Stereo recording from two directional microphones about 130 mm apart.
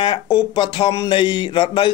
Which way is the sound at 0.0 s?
40° left (ahead or behind).